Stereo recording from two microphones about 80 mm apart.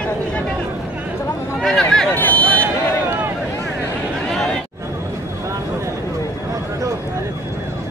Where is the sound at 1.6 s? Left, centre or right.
Centre.